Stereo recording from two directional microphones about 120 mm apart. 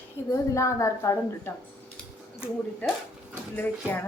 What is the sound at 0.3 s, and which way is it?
A woman's voice, 25° left (ahead or behind).